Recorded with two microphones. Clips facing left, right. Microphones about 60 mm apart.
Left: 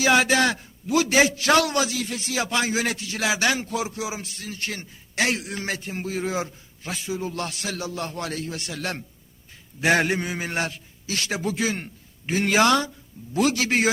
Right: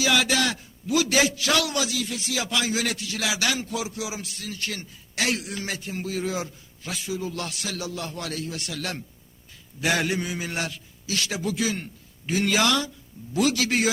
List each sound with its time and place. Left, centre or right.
0.0 s a man's voice: left